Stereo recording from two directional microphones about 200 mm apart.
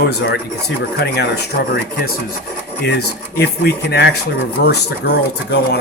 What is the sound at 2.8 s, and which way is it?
Speech, 55° left (ahead or behind).